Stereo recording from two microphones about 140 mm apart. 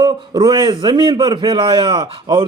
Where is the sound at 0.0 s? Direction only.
30° right (ahead or behind).